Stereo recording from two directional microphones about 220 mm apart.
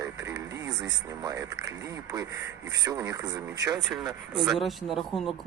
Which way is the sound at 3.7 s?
Centre (ahead or behind).